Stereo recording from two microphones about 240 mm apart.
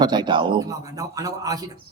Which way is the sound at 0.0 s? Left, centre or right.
Centre.